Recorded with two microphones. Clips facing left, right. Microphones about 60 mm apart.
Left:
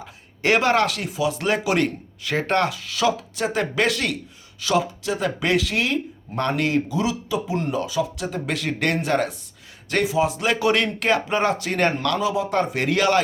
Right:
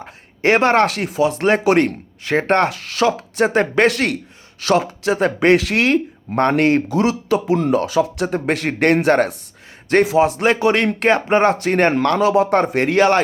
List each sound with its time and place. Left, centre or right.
0.0 s speech: right
2.6 s speech: right
6.3 s speech: right
12.2 s speech: right